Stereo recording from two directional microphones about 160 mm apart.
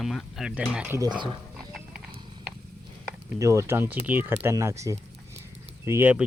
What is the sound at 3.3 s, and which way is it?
Speech, 20° right (ahead or behind).